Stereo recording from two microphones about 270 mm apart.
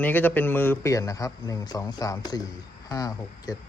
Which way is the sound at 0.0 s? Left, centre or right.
Centre.